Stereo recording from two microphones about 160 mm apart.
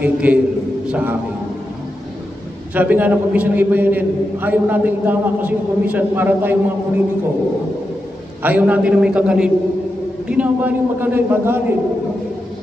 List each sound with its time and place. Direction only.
0.0 s a man's voice: 10° right (ahead or behind)
2.7 s a man's voice: 10° right (ahead or behind)
8.4 s a man's voice: 10° right (ahead or behind)